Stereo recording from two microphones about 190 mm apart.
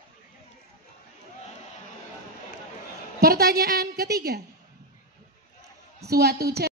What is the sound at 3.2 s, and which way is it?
Speech, 50° right (ahead or behind).